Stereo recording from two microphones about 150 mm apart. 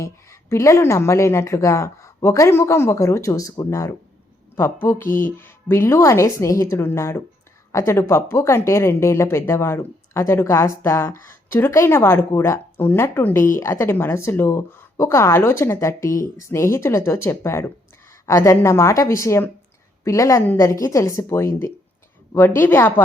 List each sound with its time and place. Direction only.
0.0 s a woman's voice: 20° left (ahead or behind)
5.0 s speech: 65° left (ahead or behind)
5.4 s a woman's voice: 15° left (ahead or behind)